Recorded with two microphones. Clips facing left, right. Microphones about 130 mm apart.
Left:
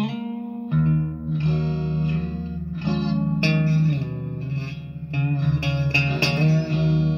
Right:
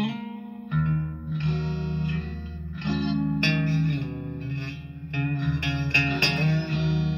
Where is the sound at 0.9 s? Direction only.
35° left (ahead or behind).